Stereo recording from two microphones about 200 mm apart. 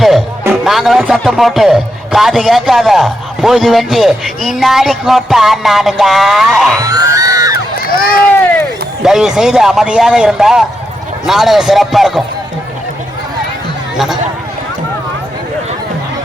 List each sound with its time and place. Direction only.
0.4 s speech: centre (ahead or behind)
6.7 s music: 15° right (ahead or behind)
7.8 s run: 45° left (ahead or behind)
9.0 s speech: 5° right (ahead or behind)
13.9 s speech: centre (ahead or behind)